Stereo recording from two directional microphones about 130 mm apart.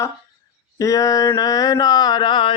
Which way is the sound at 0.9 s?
25° left (ahead or behind).